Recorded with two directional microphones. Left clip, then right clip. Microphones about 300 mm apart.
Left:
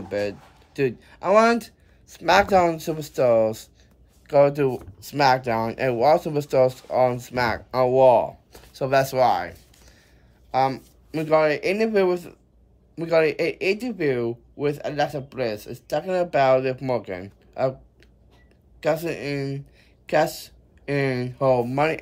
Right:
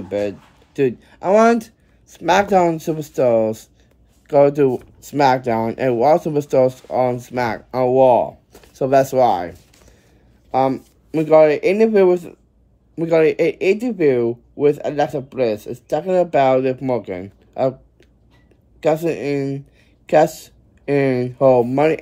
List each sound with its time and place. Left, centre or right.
0.1 s speech: centre
18.8 s speech: centre